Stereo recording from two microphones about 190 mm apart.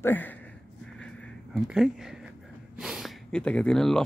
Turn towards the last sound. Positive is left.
turn(degrees=0)  # may be behind; listen again after turning